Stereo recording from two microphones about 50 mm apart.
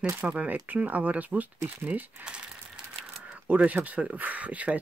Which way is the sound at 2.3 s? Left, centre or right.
Centre.